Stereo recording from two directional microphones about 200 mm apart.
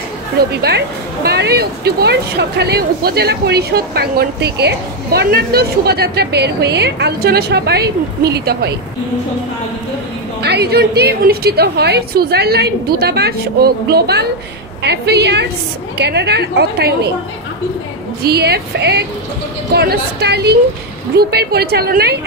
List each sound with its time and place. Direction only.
0.4 s speech: 50° right (ahead or behind)
10.4 s a woman's voice: 55° right (ahead or behind)
18.2 s a woman's voice: 55° right (ahead or behind)